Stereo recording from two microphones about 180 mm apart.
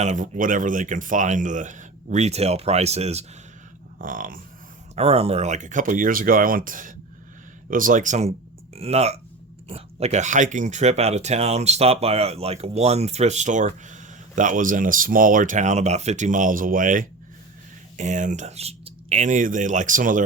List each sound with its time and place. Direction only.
0.0 s speech: 40° right (ahead or behind)
3.9 s speech: 50° right (ahead or behind)
4.9 s speech: 35° right (ahead or behind)